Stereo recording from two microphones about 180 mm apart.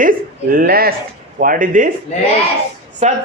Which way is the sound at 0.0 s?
50° right (ahead or behind).